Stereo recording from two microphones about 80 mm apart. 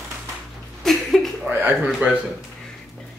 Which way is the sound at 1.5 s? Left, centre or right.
Right.